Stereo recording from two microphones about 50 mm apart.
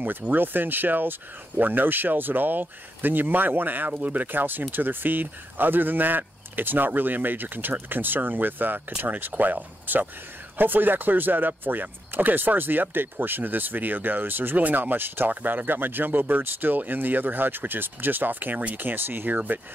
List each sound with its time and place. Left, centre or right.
0.2 s speech: right
18.9 s speech: right